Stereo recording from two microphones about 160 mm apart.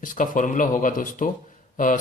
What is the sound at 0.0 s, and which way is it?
A man's voice, 55° left (ahead or behind).